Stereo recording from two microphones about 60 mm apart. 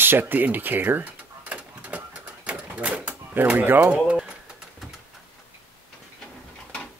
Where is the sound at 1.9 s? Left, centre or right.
Right.